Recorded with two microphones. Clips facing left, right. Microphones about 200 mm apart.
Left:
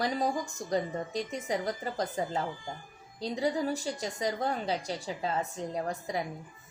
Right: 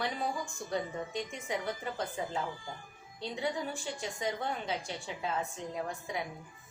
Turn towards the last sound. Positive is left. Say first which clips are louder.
# left 4 dB
turn(degrees=40)  # may be behind; listen again after turning